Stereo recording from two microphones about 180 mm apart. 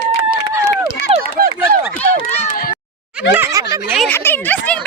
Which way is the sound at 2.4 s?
50° left (ahead or behind).